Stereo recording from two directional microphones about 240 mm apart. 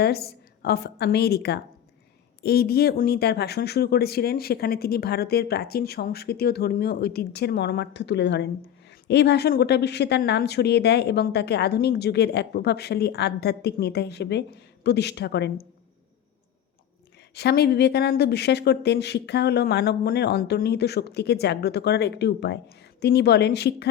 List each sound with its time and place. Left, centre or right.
0.0 s a woman's voice: left
17.3 s speech: left